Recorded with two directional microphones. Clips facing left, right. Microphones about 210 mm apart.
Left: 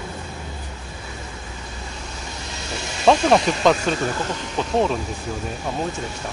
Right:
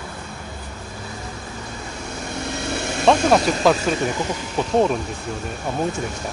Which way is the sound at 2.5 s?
55° right (ahead or behind).